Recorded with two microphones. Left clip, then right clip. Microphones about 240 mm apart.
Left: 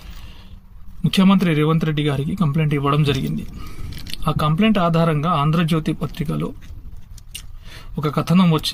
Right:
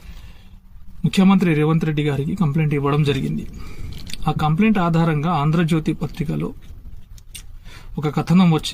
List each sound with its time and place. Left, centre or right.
1.0 s speech: centre
3.8 s a sound: left
4.2 s speech: centre
8.0 s speech: centre